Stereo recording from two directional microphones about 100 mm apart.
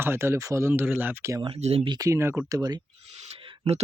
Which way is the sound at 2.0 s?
30° right (ahead or behind).